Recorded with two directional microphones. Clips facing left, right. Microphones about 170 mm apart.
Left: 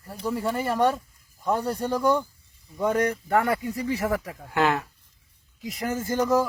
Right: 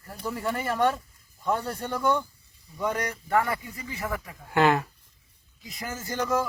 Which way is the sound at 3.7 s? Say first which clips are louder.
Left 8 dB; 75° left (ahead or behind).